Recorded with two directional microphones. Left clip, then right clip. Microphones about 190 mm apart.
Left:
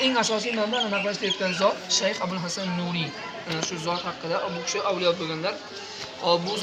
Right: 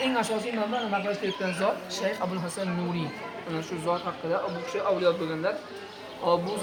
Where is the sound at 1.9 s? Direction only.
15° right (ahead or behind).